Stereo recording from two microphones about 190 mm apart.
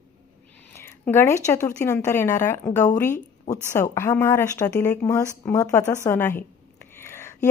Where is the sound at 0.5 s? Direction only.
10° left (ahead or behind).